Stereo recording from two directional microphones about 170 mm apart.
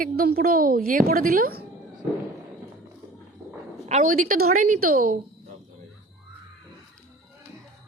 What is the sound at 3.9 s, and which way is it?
A woman's voice, 50° right (ahead or behind).